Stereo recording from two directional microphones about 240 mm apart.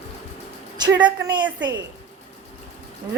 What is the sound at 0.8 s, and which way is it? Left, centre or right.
Speech, centre.